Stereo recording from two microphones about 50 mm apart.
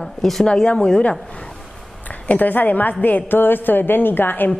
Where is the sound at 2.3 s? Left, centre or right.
Left.